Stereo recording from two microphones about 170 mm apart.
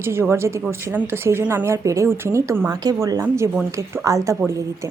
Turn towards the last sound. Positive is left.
turn(degrees=-15)  # may be behind; listen again after turning